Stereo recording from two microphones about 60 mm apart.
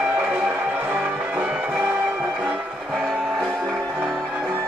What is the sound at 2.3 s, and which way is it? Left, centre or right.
Train, centre.